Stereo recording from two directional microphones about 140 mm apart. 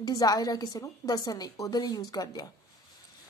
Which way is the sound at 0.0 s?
25° left (ahead or behind).